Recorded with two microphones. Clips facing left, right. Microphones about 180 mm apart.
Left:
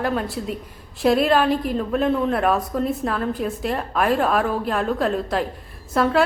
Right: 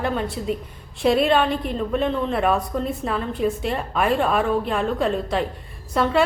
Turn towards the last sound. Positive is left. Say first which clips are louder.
# left 2 dB
turn(degrees=0)  # may be behind; listen again after turning